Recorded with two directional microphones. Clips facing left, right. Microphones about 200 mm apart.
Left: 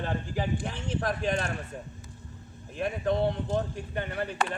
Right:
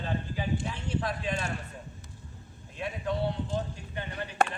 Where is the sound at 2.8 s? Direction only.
50° left (ahead or behind).